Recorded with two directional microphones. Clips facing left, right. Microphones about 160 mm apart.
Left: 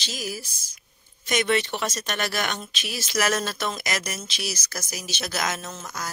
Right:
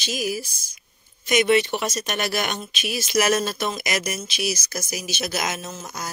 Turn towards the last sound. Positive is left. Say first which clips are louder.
# right 2 dB
turn(degrees=-15)  # may be behind; listen again after turning